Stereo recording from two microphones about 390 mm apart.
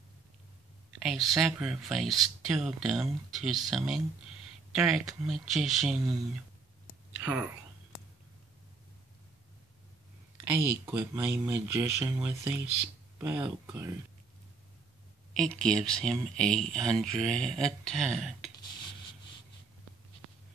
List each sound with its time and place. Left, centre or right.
1.0 s speech: centre
10.9 s speech: centre
15.3 s speech: centre